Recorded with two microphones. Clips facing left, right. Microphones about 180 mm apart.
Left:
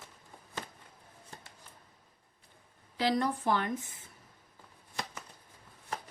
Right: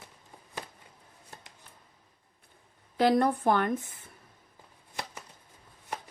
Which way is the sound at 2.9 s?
55° right (ahead or behind).